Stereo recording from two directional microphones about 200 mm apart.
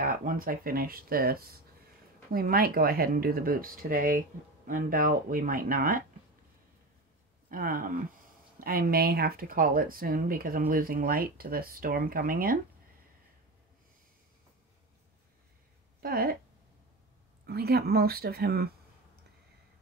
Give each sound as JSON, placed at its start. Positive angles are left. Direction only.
{"t": 0.0, "sound": "speech", "side_deg": -40}
{"t": 7.4, "sound": "speech", "side_deg": -45}
{"t": 16.0, "sound": "speech", "side_deg": -50}
{"t": 17.5, "sound": "speech", "side_deg": -50}